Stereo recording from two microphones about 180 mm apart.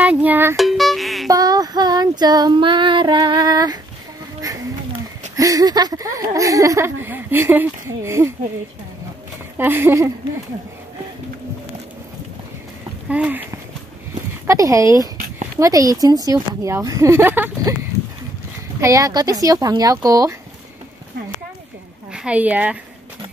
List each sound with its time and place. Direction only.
0.0 s music: 10° right (ahead or behind)
0.6 s music: centre (ahead or behind)
1.3 s female singing: 20° right (ahead or behind)
5.3 s speech: 20° right (ahead or behind)
9.6 s speech: 10° right (ahead or behind)
13.1 s speech: 10° right (ahead or behind)
15.1 s a sound: 50° right (ahead or behind)
15.6 s a woman's voice: 20° right (ahead or behind)
18.8 s a woman's voice: 20° right (ahead or behind)
22.1 s a woman's voice: 5° right (ahead or behind)